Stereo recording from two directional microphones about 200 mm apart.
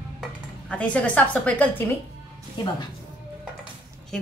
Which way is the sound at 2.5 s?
20° left (ahead or behind).